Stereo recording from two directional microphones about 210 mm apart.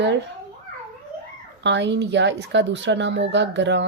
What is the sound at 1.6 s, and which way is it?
A woman's voice, 55° right (ahead or behind).